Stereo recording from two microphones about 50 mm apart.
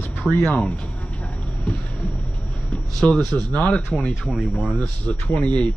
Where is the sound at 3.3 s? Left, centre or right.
Left.